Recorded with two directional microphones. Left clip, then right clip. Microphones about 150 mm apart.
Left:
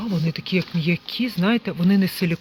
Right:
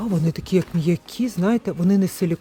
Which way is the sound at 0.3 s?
45° right (ahead or behind).